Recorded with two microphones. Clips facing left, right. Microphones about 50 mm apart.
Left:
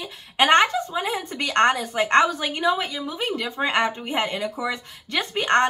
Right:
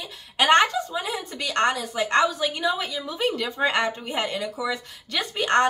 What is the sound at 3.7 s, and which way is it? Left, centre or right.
A woman's voice, left.